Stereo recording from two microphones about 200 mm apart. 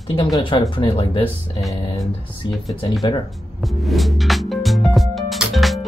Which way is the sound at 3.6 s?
Centre (ahead or behind).